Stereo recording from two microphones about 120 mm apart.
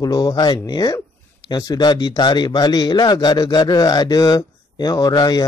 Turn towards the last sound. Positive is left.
turn(degrees=35)  # may be behind; listen again after turning